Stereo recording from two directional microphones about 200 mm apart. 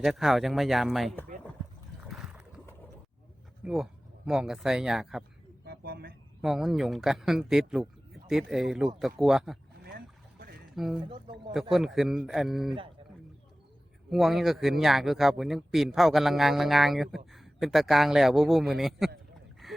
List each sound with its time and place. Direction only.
0.0 s a man's voice: centre (ahead or behind)
2.0 s boat: centre (ahead or behind)
3.6 s a man's voice: centre (ahead or behind)
5.6 s a sound: 50° right (ahead or behind)
6.4 s a man's voice: centre (ahead or behind)
10.8 s a man's voice: centre (ahead or behind)
14.1 s a man's voice: centre (ahead or behind)
19.6 s a sound: centre (ahead or behind)